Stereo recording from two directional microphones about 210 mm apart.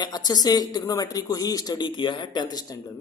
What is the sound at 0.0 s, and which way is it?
Speech, 20° left (ahead or behind).